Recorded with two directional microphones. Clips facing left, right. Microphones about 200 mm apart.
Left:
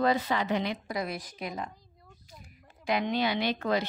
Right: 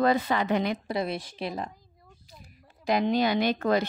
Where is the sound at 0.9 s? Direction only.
25° right (ahead or behind).